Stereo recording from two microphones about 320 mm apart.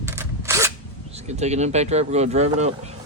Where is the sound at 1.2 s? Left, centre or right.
Right.